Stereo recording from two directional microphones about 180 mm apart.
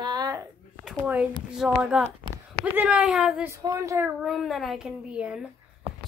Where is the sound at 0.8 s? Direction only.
5° right (ahead or behind).